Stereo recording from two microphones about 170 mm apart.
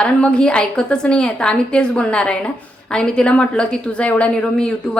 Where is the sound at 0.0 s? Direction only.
5° left (ahead or behind).